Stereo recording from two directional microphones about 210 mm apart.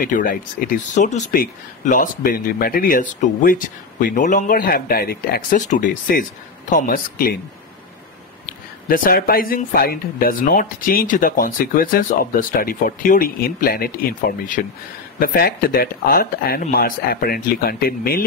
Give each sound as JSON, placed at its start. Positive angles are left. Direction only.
{"t": 0.0, "sound": "speech", "side_deg": 40}
{"t": 8.5, "sound": "speech", "side_deg": 40}